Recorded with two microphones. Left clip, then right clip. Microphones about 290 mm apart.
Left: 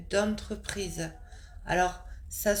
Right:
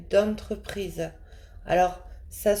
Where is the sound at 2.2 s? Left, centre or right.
Left.